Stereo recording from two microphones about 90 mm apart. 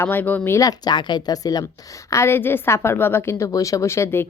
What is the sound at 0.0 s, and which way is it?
Speech, 20° left (ahead or behind).